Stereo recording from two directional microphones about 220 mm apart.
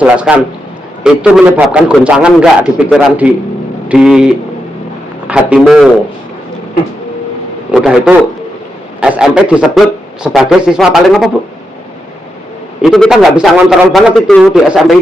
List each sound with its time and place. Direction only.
0.0 s a man's voice: 5° right (ahead or behind)
5.3 s a man's voice: 5° right (ahead or behind)
7.7 s a man's voice: 5° right (ahead or behind)
12.8 s a man's voice: centre (ahead or behind)